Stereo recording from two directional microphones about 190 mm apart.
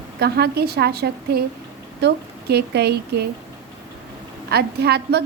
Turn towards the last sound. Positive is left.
turn(degrees=-55)  # may be behind; listen again after turning